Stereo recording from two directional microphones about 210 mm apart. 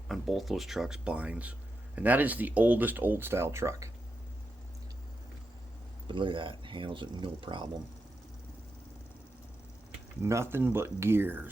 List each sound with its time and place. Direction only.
0.1 s speech: centre (ahead or behind)
6.1 s speech: 25° right (ahead or behind)
10.2 s speech: 10° right (ahead or behind)